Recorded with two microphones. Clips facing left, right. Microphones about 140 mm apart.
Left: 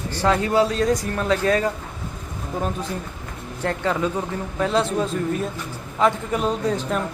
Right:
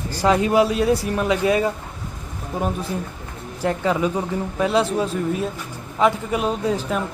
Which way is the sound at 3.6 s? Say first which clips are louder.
Right 2 dB; 10° right (ahead or behind).